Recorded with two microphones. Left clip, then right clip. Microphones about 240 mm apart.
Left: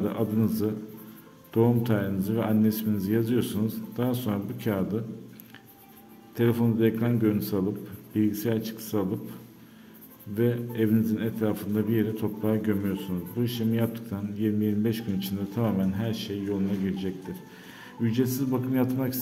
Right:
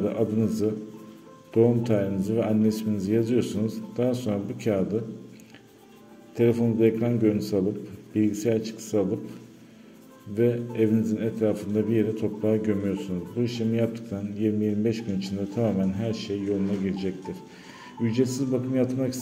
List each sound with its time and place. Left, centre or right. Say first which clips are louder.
0.0 s a man's voice: right 3 dB; centre
6.3 s a man's voice: right 3 dB; centre
10.3 s a man's voice: right 3 dB; centre